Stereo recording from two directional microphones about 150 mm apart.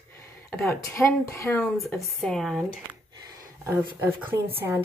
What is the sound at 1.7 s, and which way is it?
Speech, centre (ahead or behind).